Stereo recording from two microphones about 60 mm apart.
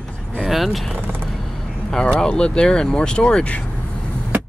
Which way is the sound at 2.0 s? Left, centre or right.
Centre.